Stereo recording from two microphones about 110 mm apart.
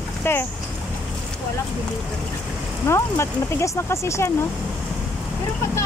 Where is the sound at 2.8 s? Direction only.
25° left (ahead or behind).